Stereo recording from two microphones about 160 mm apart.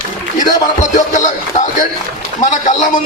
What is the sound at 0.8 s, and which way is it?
Speech, 50° left (ahead or behind).